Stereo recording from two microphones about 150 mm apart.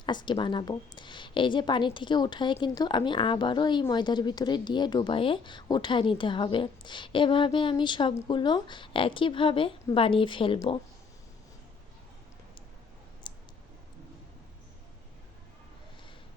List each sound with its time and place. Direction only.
0.0 s a woman's voice: 30° left (ahead or behind)
13.2 s clicking: 30° left (ahead or behind)